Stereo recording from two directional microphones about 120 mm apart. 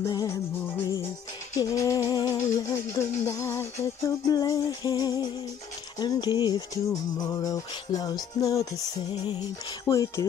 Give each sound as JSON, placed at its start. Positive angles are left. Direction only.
{"t": 0.0, "sound": "music", "side_deg": 30}
{"t": 1.6, "sound": "music", "side_deg": 25}
{"t": 9.8, "sound": "music", "side_deg": 25}